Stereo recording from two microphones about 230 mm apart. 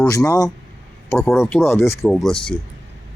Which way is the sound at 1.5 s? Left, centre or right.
Centre.